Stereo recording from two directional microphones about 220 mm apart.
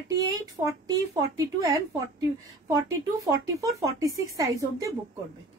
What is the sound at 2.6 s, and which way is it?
A woman's voice, 15° right (ahead or behind).